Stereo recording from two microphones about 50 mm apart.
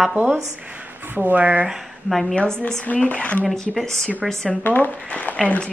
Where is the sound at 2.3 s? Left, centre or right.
Centre.